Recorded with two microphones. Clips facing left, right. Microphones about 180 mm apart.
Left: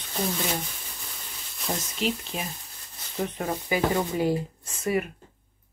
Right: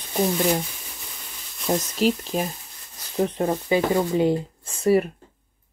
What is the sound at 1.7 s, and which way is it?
Speech, 40° right (ahead or behind).